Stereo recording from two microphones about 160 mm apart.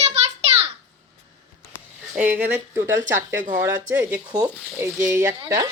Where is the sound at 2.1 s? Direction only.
10° right (ahead or behind).